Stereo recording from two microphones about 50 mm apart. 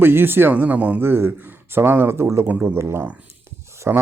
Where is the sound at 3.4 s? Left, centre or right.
Right.